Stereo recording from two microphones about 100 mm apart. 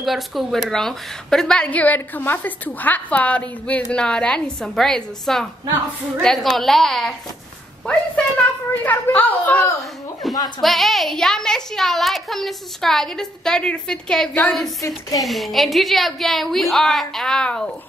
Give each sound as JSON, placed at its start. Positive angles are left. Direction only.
{"t": 0.0, "sound": "a woman's voice", "side_deg": 0}
{"t": 10.2, "sound": "a woman's voice", "side_deg": 0}
{"t": 14.8, "sound": "speech", "side_deg": 35}
{"t": 15.2, "sound": "a woman's voice", "side_deg": 0}